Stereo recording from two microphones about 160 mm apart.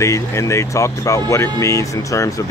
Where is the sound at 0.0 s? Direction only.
20° left (ahead or behind).